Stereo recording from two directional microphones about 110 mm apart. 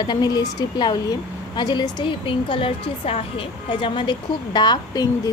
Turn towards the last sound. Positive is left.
turn(degrees=40)  # may be behind; listen again after turning